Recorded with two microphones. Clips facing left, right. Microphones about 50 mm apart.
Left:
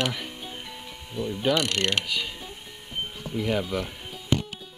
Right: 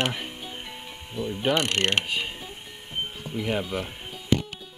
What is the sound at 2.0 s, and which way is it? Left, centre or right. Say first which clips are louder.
Pulleys: right 1 dB; right.